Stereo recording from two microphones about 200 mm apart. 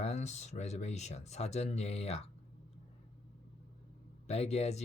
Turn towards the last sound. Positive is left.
turn(degrees=30)  # may be behind; listen again after turning